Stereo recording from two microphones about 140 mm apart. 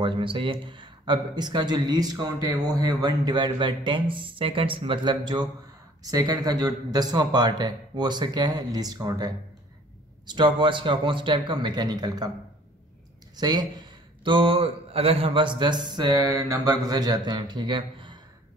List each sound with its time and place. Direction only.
0.0 s speech: 35° right (ahead or behind)
13.4 s a man's voice: 30° right (ahead or behind)